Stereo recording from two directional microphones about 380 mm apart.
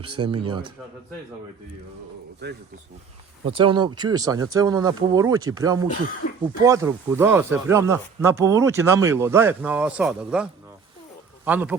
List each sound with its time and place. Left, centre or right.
0.0 s speech: centre
2.4 s speech: right
3.4 s speech: centre